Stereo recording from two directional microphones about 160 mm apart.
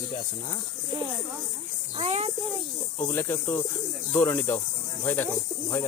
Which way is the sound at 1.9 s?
40° right (ahead or behind).